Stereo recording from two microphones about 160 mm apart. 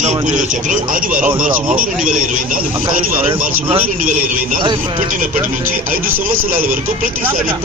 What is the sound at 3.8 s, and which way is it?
Speech, 60° right (ahead or behind).